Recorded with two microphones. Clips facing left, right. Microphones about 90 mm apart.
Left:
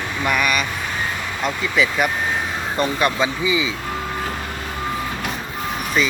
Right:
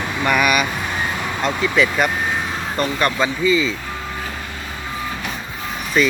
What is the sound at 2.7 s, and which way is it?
Speech, 15° left (ahead or behind).